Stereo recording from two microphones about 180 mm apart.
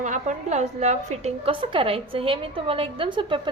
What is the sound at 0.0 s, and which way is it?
A woman's voice, 45° right (ahead or behind).